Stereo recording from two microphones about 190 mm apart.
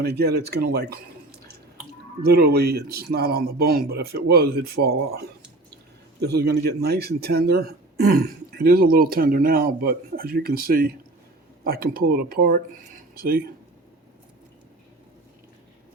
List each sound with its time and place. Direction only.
0.0 s speech: 55° right (ahead or behind)
2.2 s speech: 55° right (ahead or behind)